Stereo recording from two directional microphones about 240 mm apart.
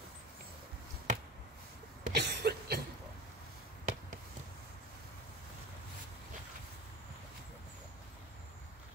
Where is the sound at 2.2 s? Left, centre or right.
Right.